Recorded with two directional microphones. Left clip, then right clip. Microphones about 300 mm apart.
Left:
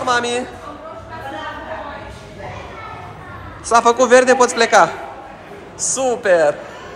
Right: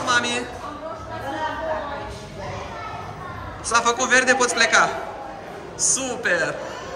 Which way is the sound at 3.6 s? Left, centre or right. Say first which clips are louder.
Left 7 dB; centre.